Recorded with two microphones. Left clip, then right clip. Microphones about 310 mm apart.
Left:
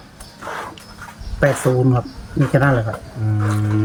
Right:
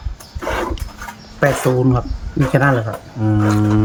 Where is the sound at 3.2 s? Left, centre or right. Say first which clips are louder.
Right 8 dB; right.